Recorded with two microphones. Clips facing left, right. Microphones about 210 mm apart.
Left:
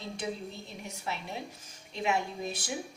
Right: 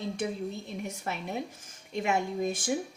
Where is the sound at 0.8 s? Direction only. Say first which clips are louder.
Right 1 dB; 50° right (ahead or behind).